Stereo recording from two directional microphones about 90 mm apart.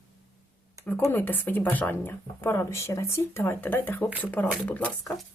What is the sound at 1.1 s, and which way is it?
A woman's voice, 25° left (ahead or behind).